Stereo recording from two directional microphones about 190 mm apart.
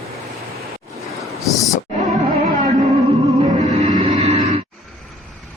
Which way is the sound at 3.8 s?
30° right (ahead or behind).